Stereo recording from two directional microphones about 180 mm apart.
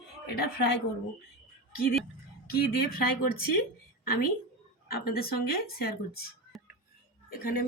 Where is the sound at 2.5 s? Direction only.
60° left (ahead or behind).